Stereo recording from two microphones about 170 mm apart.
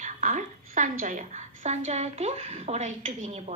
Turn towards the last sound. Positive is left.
turn(degrees=-45)  # may be behind; listen again after turning